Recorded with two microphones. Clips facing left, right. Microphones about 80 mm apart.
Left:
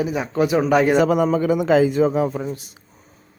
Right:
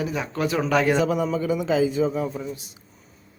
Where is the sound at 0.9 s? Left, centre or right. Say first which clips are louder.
Left 6 dB; left.